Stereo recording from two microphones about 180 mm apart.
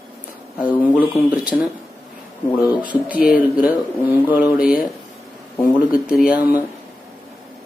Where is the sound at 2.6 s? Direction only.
10° right (ahead or behind).